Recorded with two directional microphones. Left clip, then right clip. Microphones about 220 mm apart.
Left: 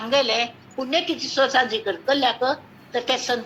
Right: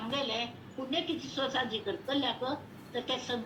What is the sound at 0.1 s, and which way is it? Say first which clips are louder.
A woman's voice: left 14 dB; 55° left (ahead or behind).